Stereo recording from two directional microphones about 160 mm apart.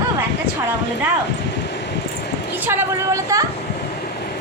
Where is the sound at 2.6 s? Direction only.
20° right (ahead or behind).